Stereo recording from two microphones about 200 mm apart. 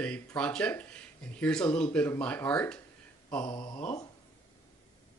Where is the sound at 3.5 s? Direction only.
20° left (ahead or behind).